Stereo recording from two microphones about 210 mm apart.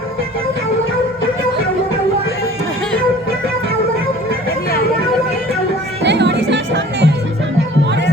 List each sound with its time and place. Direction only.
6.0 s music: 55° right (ahead or behind)